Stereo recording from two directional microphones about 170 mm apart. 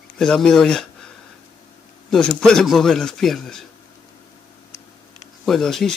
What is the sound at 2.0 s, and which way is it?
A man's voice, 5° left (ahead or behind).